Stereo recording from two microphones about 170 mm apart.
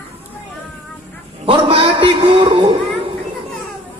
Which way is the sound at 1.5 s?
30° right (ahead or behind).